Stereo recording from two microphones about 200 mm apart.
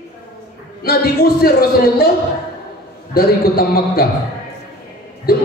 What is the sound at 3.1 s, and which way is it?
Speech, 50° left (ahead or behind).